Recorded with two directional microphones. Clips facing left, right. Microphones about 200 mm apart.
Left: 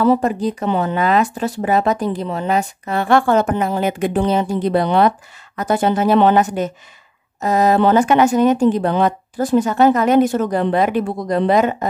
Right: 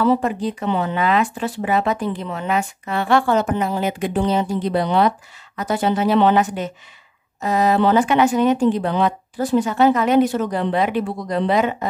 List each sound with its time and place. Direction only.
0.0 s speech: 40° left (ahead or behind)